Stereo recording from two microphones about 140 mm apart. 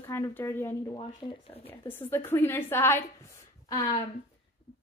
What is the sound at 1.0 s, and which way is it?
Speech, 40° left (ahead or behind).